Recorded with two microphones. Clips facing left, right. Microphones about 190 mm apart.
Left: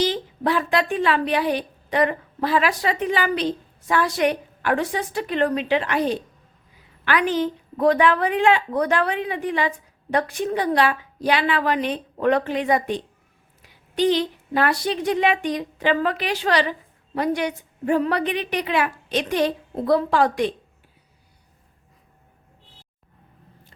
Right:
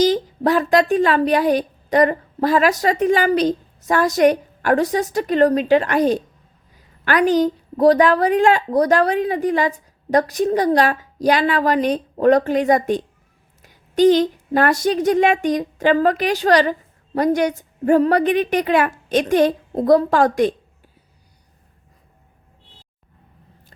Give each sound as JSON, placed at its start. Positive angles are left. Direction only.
{"t": 0.0, "sound": "a woman's voice", "side_deg": -40}